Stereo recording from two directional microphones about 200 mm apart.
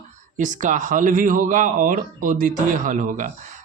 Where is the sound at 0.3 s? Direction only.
40° right (ahead or behind).